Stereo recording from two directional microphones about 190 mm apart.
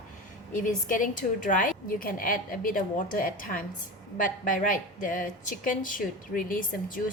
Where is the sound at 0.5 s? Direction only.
45° left (ahead or behind).